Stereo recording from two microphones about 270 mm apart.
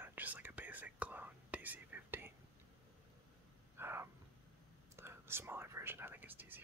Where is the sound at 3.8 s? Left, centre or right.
Centre.